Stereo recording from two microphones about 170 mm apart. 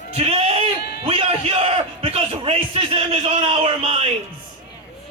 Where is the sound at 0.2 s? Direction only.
35° right (ahead or behind).